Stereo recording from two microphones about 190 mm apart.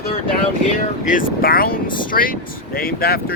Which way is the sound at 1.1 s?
45° left (ahead or behind).